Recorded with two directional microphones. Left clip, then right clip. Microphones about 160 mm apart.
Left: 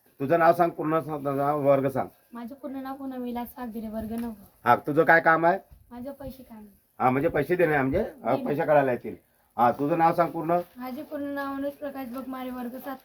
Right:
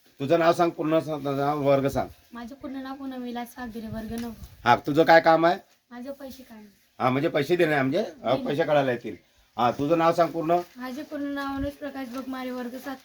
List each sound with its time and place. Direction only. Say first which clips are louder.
0.2 s speech: left 1 dB; 55° right (ahead or behind)
0.8 s speech: right 2 dB; 80° right
2.3 s speech: even; centre (ahead or behind)
4.6 s speech: right 1 dB; 90° right
5.9 s speech: right 1 dB; 5° left (ahead or behind)
6.9 s speech: even; 90° right; by 10.6 s 55° right (ahead or behind)
10.8 s speech: right 1 dB; 5° left (ahead or behind)